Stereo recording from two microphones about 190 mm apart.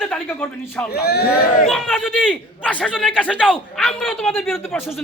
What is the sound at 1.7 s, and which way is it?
A man's voice, centre (ahead or behind).